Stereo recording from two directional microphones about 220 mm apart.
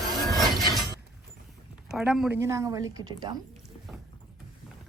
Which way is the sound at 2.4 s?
15° right (ahead or behind).